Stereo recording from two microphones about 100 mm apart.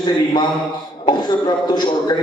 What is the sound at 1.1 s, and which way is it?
Speech, 45° left (ahead or behind).